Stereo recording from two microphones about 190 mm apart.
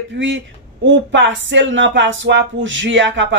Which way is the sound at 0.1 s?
70° right (ahead or behind).